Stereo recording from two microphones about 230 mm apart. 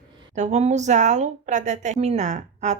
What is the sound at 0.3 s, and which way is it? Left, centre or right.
A woman's voice, right.